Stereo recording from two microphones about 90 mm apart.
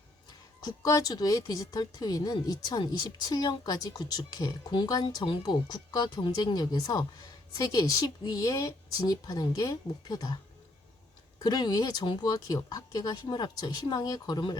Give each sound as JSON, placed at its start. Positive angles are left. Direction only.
{"t": 0.3, "sound": "speech", "side_deg": 45}
{"t": 5.2, "sound": "speech", "side_deg": 60}
{"t": 11.3, "sound": "speech", "side_deg": 45}